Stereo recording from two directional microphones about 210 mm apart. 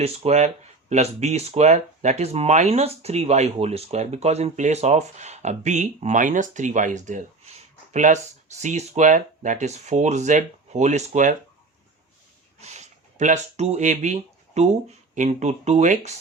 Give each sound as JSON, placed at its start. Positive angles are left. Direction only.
{"t": 0.0, "sound": "speech", "side_deg": -30}
{"t": 12.6, "sound": "speech", "side_deg": -35}